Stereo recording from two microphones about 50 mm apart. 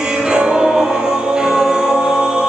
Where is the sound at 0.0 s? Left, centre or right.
Centre.